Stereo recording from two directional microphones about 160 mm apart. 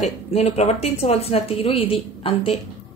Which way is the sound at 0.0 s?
40° left (ahead or behind).